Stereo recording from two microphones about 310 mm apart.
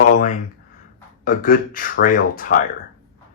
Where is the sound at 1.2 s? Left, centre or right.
Left.